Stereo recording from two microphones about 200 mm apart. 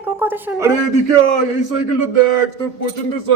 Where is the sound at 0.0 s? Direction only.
10° right (ahead or behind).